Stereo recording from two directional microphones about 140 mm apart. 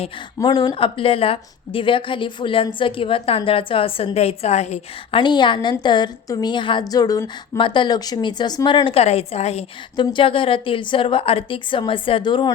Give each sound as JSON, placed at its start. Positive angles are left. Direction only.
{"t": 0.3, "sound": "a woman's voice", "side_deg": 30}
{"t": 5.2, "sound": "a woman's voice", "side_deg": 35}
{"t": 10.0, "sound": "a woman's voice", "side_deg": 35}